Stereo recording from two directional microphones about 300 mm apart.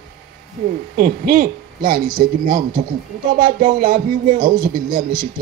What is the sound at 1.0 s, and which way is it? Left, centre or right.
Speech, right.